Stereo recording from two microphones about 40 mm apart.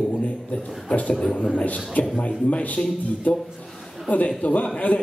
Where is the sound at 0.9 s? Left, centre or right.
Left.